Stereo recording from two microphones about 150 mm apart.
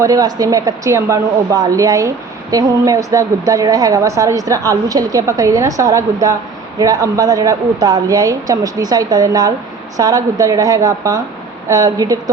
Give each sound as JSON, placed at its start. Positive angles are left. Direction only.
{"t": 0.0, "sound": "a woman's voice", "side_deg": -25}